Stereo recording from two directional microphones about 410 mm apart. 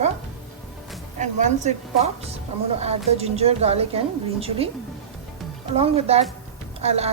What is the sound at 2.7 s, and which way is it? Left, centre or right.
A woman's voice, centre.